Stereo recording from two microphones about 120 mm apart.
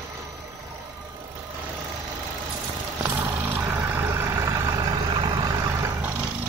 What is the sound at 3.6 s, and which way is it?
Vehicle, 20° right (ahead or behind).